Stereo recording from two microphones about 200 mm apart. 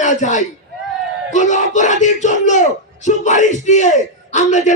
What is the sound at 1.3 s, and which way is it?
A man's voice, 40° left (ahead or behind).